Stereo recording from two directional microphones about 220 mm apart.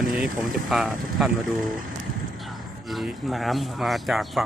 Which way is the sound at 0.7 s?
Centre (ahead or behind).